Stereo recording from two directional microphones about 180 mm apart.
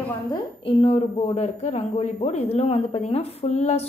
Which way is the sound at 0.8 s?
35° left (ahead or behind).